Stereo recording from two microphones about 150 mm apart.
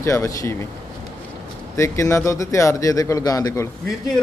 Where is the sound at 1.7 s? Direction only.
20° left (ahead or behind).